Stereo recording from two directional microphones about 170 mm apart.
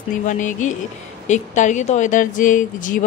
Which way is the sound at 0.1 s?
50° left (ahead or behind).